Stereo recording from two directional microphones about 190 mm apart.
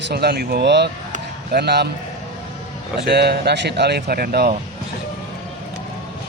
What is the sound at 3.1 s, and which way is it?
Speech, 60° right (ahead or behind).